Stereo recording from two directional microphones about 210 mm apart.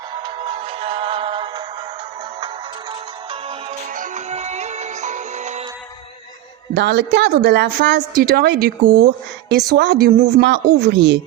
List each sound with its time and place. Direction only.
0.1 s music: 25° right (ahead or behind)
3.7 s music: 40° right (ahead or behind)
6.7 s a woman's voice: 55° right (ahead or behind)